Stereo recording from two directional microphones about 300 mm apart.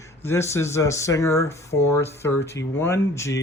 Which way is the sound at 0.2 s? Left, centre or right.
Centre.